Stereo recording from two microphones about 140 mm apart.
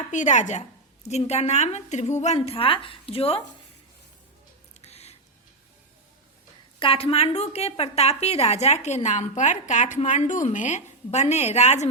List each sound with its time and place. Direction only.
0.1 s a woman's voice: 60° left (ahead or behind)
2.5 s a woman's voice: 40° left (ahead or behind)
4.8 s a sound: 50° left (ahead or behind)
6.7 s a woman's voice: 40° left (ahead or behind)